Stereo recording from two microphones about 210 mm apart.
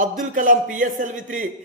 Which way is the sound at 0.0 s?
40° right (ahead or behind).